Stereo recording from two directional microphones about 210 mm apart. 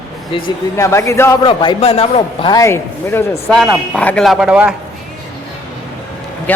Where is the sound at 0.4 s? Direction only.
15° left (ahead or behind).